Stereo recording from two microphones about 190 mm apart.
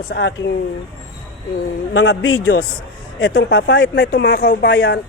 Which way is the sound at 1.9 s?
90° left.